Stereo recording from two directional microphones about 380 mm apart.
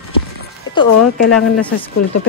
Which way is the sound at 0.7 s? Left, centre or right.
Left.